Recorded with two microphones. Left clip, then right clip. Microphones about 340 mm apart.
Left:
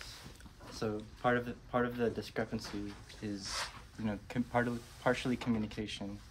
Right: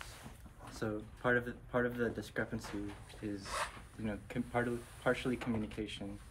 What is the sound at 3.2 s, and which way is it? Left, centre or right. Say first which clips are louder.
Speech: even; left.